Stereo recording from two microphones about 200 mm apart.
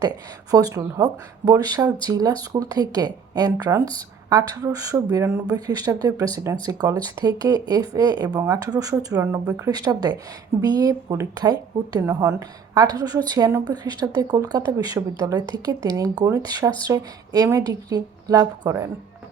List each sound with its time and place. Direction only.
0.5 s speech: 15° right (ahead or behind)